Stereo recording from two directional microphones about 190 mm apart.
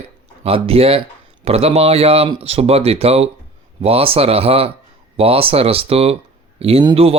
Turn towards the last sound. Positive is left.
turn(degrees=-30)  # may be behind; listen again after turning